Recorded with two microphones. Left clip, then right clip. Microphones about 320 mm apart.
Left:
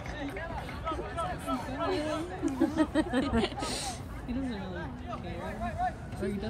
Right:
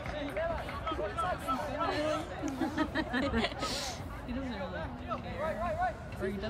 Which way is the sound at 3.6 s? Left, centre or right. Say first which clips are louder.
Left 1 dB; centre.